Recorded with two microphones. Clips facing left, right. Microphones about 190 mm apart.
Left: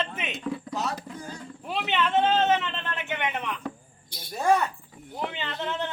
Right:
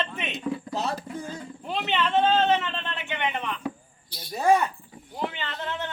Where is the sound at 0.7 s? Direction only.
30° right (ahead or behind).